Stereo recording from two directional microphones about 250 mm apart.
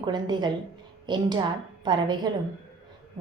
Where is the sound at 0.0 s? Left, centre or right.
Centre.